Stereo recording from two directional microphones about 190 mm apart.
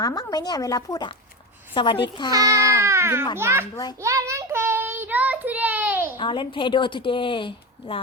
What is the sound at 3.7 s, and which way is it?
Speech, 20° left (ahead or behind).